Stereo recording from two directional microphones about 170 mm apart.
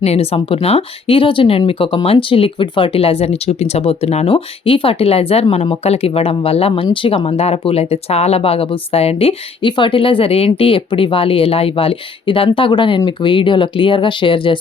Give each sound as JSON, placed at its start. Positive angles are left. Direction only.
{"t": 0.0, "sound": "speech", "side_deg": 35}